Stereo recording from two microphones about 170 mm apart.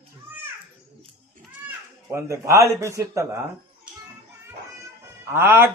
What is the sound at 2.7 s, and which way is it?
Speech, 15° right (ahead or behind).